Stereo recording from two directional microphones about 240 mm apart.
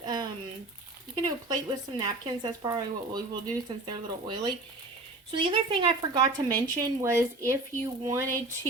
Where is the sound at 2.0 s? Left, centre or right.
Centre.